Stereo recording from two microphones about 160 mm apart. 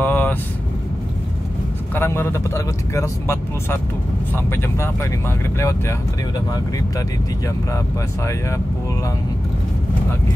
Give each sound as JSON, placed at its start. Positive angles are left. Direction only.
{"t": 0.0, "sound": "vehicle", "side_deg": 10}
{"t": 2.0, "sound": "speech", "side_deg": 15}